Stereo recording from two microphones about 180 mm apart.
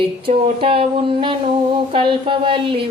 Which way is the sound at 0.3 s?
30° right (ahead or behind).